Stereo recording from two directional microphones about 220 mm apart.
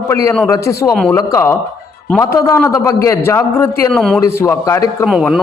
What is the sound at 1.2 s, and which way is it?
A man's voice, 15° left (ahead or behind).